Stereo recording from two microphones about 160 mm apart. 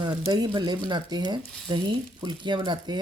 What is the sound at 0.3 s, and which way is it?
Speech, 25° right (ahead or behind).